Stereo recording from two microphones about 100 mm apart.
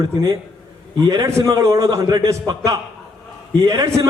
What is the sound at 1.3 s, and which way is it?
A man's voice, 30° right (ahead or behind).